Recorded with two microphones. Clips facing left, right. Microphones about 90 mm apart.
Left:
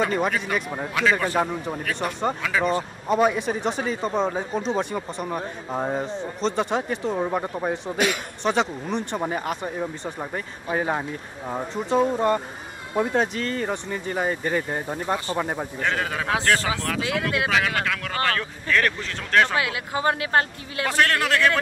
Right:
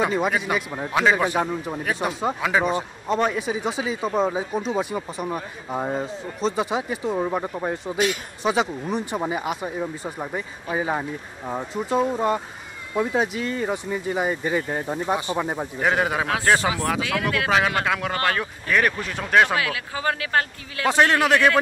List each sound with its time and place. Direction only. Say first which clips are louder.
0.0 s speech: right 1 dB; 10° right (ahead or behind)
1.4 s speech: even; centre (ahead or behind)
3.1 s speech: left 2 dB; 5° left (ahead or behind)
15.0 s speech: right 1 dB; 15° right (ahead or behind)
15.3 s speech: right 1 dB; 5° right (ahead or behind)
15.8 s speech: right 5 dB; 15° right (ahead or behind)
19.6 s speech: left 2 dB; 25° left (ahead or behind)
20.8 s a man's voice: right 3 dB; 20° right (ahead or behind)